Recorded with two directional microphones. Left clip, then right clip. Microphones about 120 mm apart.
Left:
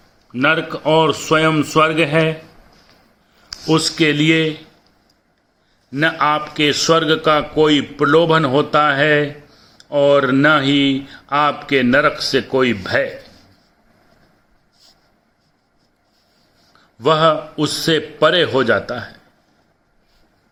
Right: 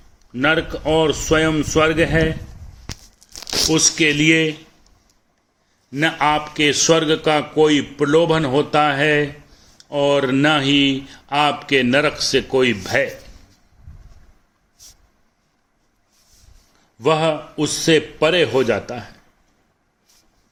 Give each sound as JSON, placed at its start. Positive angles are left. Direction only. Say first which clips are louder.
{"t": 0.3, "sound": "a man's voice", "louder": "left 2 dB", "side_deg": -25}
{"t": 4.0, "sound": "a man's voice", "louder": "left 1 dB", "side_deg": -40}
{"t": 5.9, "sound": "a man's voice", "louder": "left 2 dB", "side_deg": -45}
{"t": 17.0, "sound": "a man's voice", "louder": "left 4 dB", "side_deg": -40}